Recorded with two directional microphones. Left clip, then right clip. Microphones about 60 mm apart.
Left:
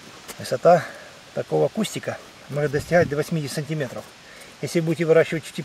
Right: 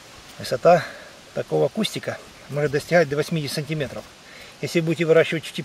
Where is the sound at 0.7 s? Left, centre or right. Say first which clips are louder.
Even; centre.